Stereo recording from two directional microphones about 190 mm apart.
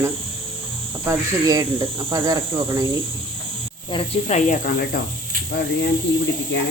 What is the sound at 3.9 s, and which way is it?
Speech, 35° left (ahead or behind).